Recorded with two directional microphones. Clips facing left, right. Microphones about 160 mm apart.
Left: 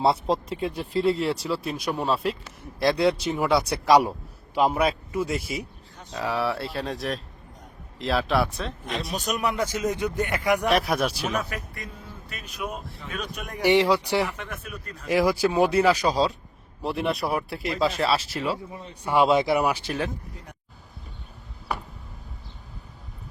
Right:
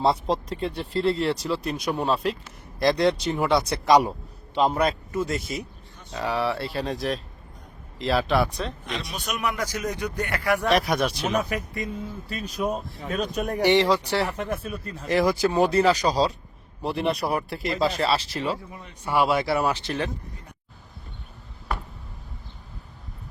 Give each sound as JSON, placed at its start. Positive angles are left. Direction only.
{"t": 0.0, "sound": "speech", "side_deg": 5}
{"t": 9.1, "sound": "speech", "side_deg": 40}
{"t": 10.7, "sound": "speech", "side_deg": 0}
{"t": 11.4, "sound": "speech", "side_deg": -20}
{"t": 12.3, "sound": "speech", "side_deg": -35}
{"t": 13.7, "sound": "speech", "side_deg": 10}
{"t": 14.3, "sound": "speech", "side_deg": -35}
{"t": 15.0, "sound": "speech", "side_deg": 10}
{"t": 18.7, "sound": "speech", "side_deg": 30}
{"t": 19.0, "sound": "speech", "side_deg": 15}